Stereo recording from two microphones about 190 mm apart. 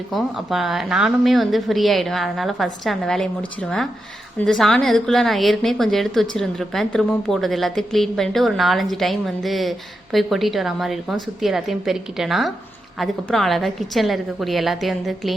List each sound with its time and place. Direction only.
0.1 s a woman's voice: centre (ahead or behind)